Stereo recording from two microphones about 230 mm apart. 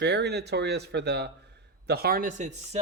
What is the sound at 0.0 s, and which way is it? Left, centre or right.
Speech, right.